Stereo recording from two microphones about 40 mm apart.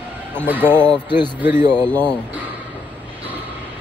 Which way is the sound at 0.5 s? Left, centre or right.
Right.